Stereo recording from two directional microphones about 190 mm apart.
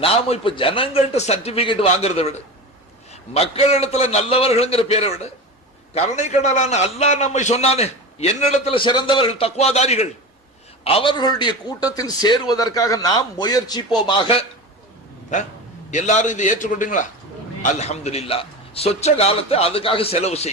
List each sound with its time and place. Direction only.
0.0 s a man's voice: 30° left (ahead or behind)
15.3 s a man's voice: 40° left (ahead or behind)